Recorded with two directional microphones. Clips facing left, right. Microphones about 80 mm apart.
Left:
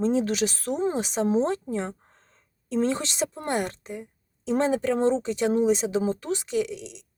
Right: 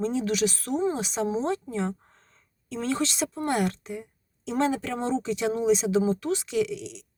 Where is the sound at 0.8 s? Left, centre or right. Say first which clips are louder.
Left 2 dB; left.